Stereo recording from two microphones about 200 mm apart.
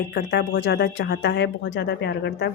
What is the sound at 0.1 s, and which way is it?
A woman's voice, 55° left (ahead or behind).